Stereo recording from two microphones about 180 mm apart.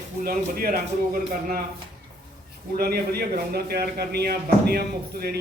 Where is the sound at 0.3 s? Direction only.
55° right (ahead or behind).